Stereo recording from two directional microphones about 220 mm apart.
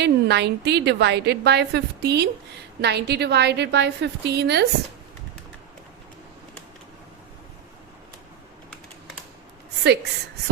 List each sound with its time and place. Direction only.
0.0 s a woman's voice: 50° right (ahead or behind)
9.8 s a woman's voice: 50° right (ahead or behind)